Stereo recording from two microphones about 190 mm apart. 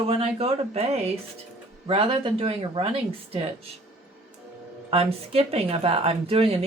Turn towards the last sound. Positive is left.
turn(degrees=-30)  # may be behind; listen again after turning